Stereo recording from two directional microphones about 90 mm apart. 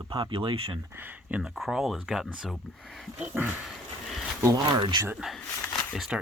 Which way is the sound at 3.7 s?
Centre (ahead or behind).